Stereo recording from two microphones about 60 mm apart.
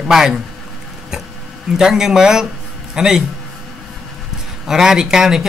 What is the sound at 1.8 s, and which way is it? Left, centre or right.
A man's voice, centre.